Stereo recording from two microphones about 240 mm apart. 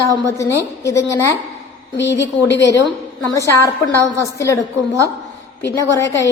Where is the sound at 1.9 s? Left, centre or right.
Left.